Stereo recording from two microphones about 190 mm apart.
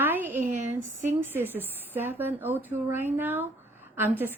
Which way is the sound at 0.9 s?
40° right (ahead or behind).